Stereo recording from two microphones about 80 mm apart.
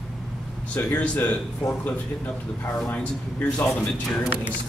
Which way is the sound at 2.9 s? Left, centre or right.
Centre.